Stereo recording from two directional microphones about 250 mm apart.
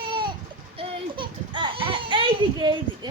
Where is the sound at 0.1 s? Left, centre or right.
Centre.